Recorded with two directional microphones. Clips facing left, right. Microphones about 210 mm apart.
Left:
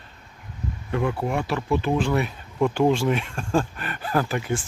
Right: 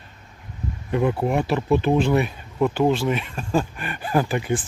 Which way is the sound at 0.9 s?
20° right (ahead or behind).